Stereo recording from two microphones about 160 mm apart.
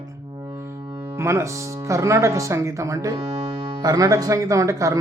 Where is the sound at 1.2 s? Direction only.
15° right (ahead or behind).